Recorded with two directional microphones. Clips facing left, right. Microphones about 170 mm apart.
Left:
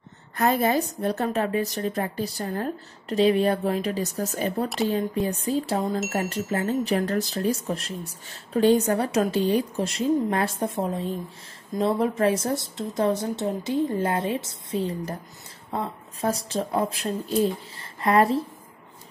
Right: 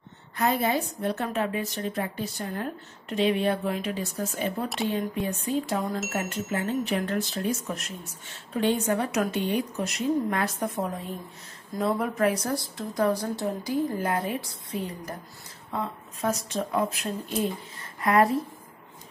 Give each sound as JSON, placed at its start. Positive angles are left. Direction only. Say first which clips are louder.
{"t": 0.4, "sound": "a woman's voice", "louder": "left 3 dB", "side_deg": 45}